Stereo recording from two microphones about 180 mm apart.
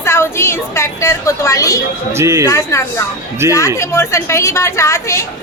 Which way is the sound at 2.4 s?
15° left (ahead or behind).